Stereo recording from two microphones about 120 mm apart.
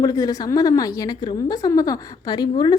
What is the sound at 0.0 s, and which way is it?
A woman's voice, 30° left (ahead or behind).